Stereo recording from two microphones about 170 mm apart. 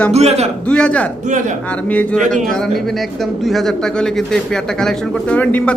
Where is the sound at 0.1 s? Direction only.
40° right (ahead or behind).